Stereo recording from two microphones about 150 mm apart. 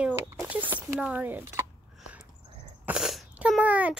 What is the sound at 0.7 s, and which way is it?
Speech, 10° right (ahead or behind).